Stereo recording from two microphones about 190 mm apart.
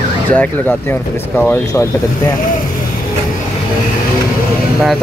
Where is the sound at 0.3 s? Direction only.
10° left (ahead or behind).